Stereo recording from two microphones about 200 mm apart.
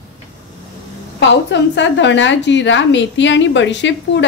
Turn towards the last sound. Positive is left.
turn(degrees=65)  # may be behind; listen again after turning